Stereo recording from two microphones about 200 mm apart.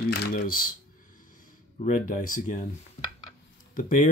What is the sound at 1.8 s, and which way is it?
Speech, 40° left (ahead or behind).